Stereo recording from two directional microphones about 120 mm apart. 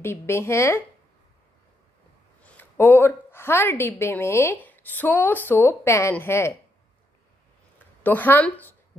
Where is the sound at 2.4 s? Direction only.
15° left (ahead or behind).